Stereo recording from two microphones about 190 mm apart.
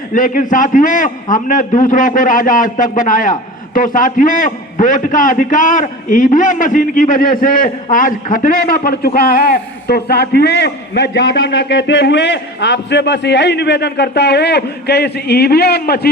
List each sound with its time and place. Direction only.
0.1 s a man's voice: 45° left (ahead or behind)